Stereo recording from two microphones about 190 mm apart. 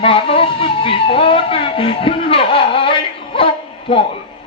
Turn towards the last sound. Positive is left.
turn(degrees=30)  # may be behind; listen again after turning